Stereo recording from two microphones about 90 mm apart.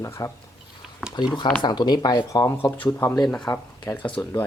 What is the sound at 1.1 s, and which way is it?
Speech, 55° left (ahead or behind).